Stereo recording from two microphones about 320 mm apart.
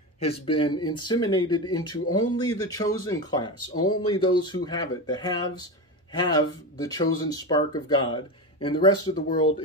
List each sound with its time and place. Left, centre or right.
0.2 s speech: centre
3.7 s speech: left
4.1 s speech: centre